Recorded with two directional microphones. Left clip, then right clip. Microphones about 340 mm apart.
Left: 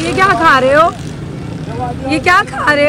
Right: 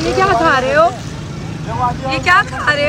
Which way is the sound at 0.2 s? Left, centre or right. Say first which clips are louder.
Left 4 dB; centre.